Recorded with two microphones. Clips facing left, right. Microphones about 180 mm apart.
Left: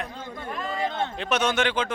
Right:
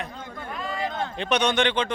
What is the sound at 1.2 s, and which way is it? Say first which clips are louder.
Speech: right 2 dB; 5° left (ahead or behind).